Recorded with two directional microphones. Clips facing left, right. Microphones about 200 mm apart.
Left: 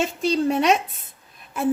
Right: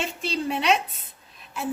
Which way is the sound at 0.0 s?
40° left (ahead or behind).